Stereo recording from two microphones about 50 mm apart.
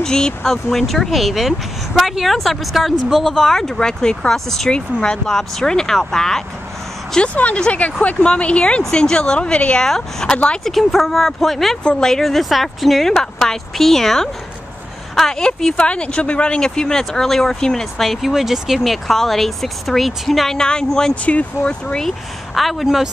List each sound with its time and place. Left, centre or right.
0.0 s speech: centre
7.3 s speech: left
9.8 s speech: centre
10.3 s speech: left
10.6 s speech: centre
11.8 s speech: centre
18.0 s speech: centre
21.1 s speech: left
22.0 s speech: centre